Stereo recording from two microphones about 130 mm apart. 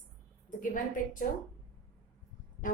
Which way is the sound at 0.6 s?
90° left.